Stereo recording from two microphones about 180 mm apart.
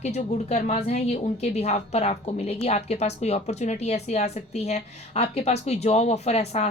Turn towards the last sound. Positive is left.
turn(degrees=35)  # may be behind; listen again after turning